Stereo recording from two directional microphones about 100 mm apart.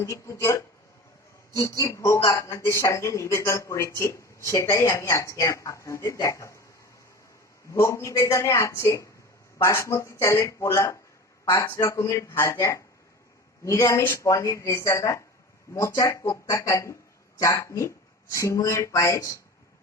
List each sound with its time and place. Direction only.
0.0 s speech: 30° left (ahead or behind)
7.7 s speech: 30° left (ahead or behind)